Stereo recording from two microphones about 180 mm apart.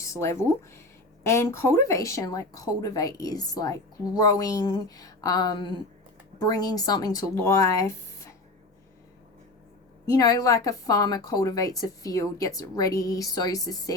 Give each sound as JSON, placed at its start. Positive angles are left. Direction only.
{"t": 0.0, "sound": "speech", "side_deg": 15}
{"t": 10.1, "sound": "speech", "side_deg": 20}